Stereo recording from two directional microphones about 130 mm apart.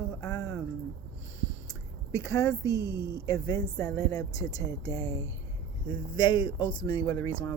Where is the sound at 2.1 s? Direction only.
25° left (ahead or behind).